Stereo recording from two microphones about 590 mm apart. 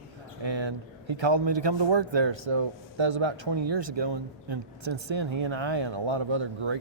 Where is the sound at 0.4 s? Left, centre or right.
Right.